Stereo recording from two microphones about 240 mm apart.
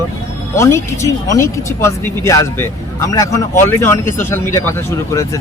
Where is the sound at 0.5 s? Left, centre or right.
Centre.